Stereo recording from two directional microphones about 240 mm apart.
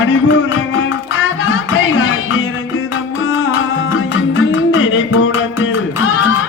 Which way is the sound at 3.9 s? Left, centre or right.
Left.